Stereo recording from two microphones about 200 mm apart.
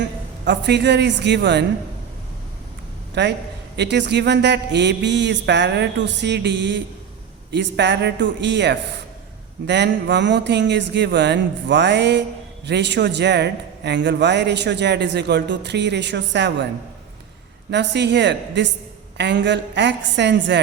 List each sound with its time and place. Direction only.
0.4 s a man's voice: 60° right (ahead or behind)
3.2 s a man's voice: 60° right (ahead or behind)
17.7 s a man's voice: 60° right (ahead or behind)